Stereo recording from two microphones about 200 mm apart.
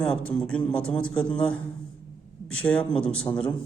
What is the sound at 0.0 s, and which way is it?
A man's voice, 5° left (ahead or behind).